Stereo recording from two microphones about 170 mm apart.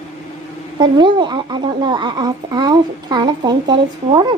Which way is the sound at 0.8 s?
25° right (ahead or behind).